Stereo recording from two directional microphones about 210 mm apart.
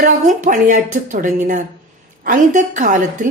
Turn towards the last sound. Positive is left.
turn(degrees=-40)  # may be behind; listen again after turning